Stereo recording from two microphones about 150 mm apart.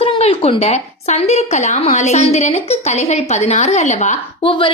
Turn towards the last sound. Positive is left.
turn(degrees=35)  # may be behind; listen again after turning